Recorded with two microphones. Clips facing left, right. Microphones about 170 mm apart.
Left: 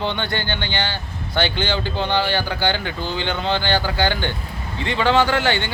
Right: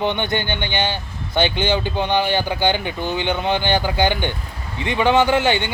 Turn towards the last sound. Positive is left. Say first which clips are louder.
# right 3 dB
turn(degrees=-20)  # may be behind; listen again after turning